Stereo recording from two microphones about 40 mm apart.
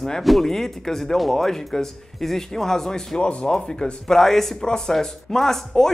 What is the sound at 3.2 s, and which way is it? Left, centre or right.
Speech, left.